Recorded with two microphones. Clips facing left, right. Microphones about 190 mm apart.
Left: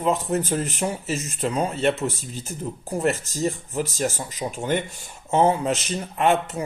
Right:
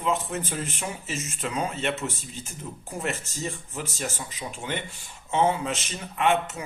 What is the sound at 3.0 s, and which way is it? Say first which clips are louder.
Speech: left 8 dB; 40° left (ahead or behind).